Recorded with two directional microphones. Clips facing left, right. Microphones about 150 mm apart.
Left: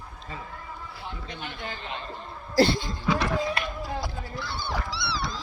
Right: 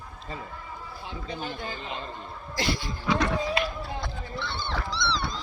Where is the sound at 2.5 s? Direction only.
35° left (ahead or behind).